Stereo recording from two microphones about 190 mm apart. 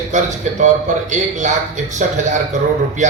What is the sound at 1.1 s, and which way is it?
Speech, 40° right (ahead or behind).